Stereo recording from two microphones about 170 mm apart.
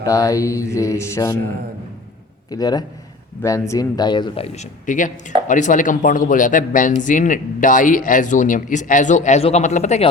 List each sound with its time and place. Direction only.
0.0 s a man's voice: 20° left (ahead or behind)
2.5 s a man's voice: 25° left (ahead or behind); by 10.1 s 40° left (ahead or behind)